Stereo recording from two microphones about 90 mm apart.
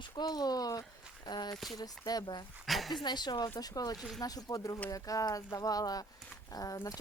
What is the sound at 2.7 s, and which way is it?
Speech, centre (ahead or behind).